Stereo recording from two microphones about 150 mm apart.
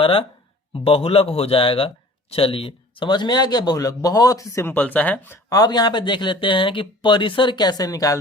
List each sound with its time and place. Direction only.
0.0 s a man's voice: 40° left (ahead or behind); by 5.4 s 10° left (ahead or behind)
5.5 s speech: 25° left (ahead or behind)